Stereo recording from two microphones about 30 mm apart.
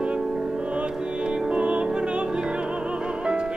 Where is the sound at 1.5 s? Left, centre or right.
Right.